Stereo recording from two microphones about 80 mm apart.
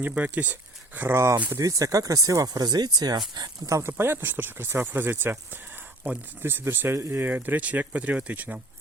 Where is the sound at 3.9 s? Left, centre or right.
Right.